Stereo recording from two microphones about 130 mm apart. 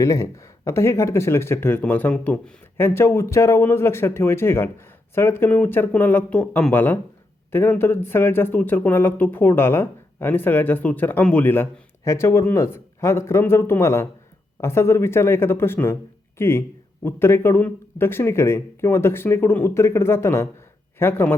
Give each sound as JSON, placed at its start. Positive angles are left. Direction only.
{"t": 0.0, "sound": "speech", "side_deg": 25}